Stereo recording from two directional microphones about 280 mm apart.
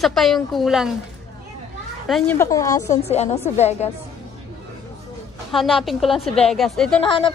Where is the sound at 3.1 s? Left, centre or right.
Left.